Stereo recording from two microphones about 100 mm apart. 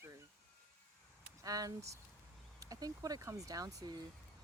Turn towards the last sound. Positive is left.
turn(degrees=-35)  # may be behind; listen again after turning